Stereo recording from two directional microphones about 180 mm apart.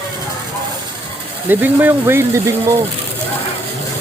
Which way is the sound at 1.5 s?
10° right (ahead or behind).